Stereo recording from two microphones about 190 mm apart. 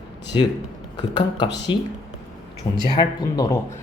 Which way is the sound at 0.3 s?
30° left (ahead or behind).